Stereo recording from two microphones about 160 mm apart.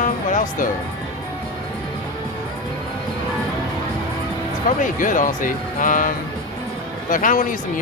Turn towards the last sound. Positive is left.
turn(degrees=55)  # may be behind; listen again after turning